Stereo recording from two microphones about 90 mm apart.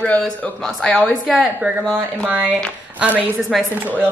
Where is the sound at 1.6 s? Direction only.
15° right (ahead or behind).